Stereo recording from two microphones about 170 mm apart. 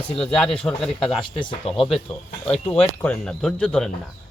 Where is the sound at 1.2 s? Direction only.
30° left (ahead or behind).